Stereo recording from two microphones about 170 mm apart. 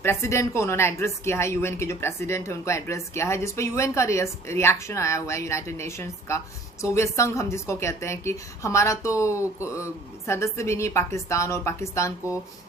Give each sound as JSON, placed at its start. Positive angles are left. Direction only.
{"t": 0.0, "sound": "a woman's voice", "side_deg": 15}